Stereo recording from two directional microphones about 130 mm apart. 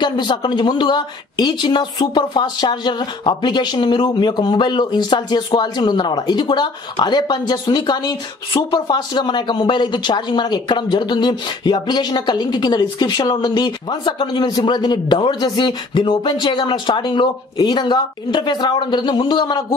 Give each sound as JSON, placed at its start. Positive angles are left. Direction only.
{"t": 0.0, "sound": "speech", "side_deg": 35}